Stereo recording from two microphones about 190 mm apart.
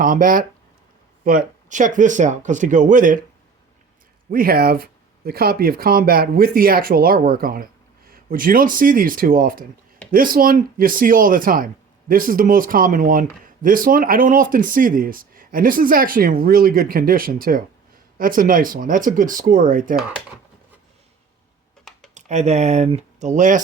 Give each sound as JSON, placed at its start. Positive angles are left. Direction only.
{"t": 0.0, "sound": "speech", "side_deg": -45}
{"t": 4.3, "sound": "speech", "side_deg": -50}
{"t": 22.1, "sound": "speech", "side_deg": -35}